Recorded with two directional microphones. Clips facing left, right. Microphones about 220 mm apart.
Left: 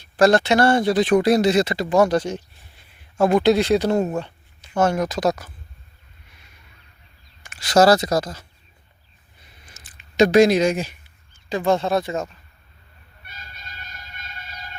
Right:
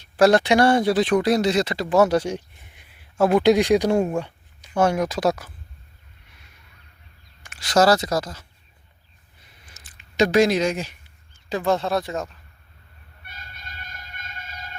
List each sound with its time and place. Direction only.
0.2 s speech: 10° right (ahead or behind)
1.2 s speech: 5° left (ahead or behind); by 2.8 s 20° right (ahead or behind)
3.2 s speech: 5° right (ahead or behind)
7.4 s speech: centre (ahead or behind)
9.7 s speech: 20° left (ahead or behind); by 12.3 s centre (ahead or behind)
13.2 s train: 55° right (ahead or behind)